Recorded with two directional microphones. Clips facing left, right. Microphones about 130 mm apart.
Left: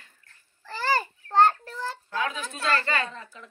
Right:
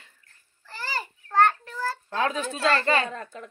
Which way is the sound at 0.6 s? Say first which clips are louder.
Left 9 dB; 75° left (ahead or behind).